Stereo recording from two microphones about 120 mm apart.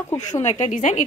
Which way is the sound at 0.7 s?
90° left.